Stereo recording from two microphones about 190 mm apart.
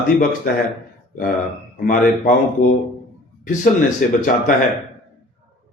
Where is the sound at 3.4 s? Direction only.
45° left (ahead or behind).